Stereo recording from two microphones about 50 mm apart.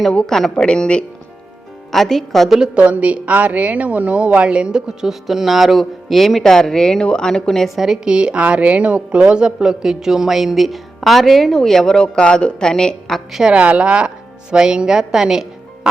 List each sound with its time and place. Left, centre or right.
0.1 s speech: centre
1.9 s a woman's voice: centre
2.7 s a woman's voice: right
4.9 s a woman's voice: centre
8.0 s a woman's voice: centre
13.5 s a woman's voice: right